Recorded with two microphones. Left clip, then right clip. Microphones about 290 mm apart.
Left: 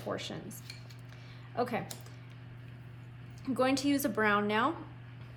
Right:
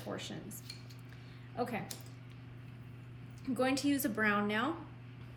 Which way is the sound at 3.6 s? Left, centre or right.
Centre.